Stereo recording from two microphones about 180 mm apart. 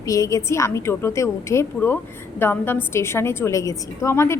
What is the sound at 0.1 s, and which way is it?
A woman's voice, 20° left (ahead or behind).